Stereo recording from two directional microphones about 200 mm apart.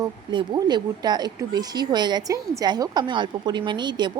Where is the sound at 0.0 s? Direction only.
20° right (ahead or behind).